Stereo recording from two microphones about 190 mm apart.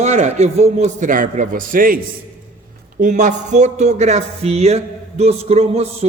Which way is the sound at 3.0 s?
40° right (ahead or behind).